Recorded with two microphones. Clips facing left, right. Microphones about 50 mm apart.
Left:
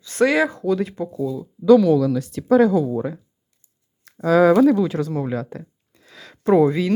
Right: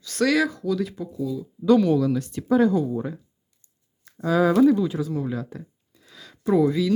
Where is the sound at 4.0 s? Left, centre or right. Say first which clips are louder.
Left 6 dB; left.